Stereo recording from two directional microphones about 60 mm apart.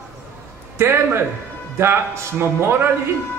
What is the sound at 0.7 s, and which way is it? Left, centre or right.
A man's voice, right.